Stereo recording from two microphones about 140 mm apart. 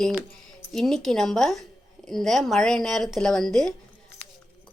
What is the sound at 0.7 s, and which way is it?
Speech, 5° left (ahead or behind).